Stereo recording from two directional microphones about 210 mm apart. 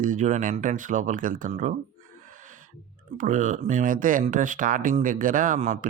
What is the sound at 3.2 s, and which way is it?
Speech, 35° right (ahead or behind).